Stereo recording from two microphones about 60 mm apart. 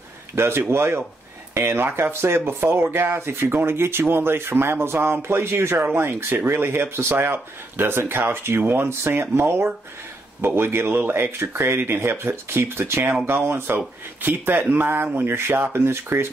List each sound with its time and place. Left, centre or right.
0.4 s speech: right